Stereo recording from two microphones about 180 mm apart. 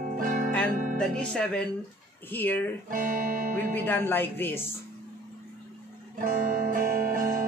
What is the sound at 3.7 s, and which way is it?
Speech, 10° left (ahead or behind).